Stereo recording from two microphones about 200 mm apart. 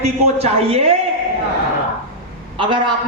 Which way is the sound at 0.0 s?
30° right (ahead or behind).